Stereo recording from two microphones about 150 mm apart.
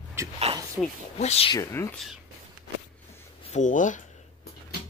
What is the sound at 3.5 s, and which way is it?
Speech, 55° left (ahead or behind).